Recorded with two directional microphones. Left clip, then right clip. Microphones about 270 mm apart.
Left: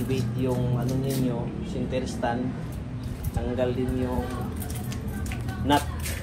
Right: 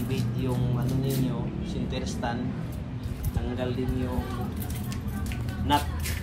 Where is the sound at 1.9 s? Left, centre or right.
Centre.